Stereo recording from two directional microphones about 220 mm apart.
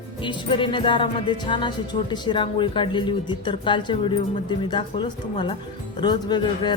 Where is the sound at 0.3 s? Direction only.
20° left (ahead or behind).